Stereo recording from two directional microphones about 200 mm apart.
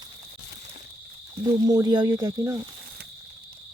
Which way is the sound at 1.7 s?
20° right (ahead or behind).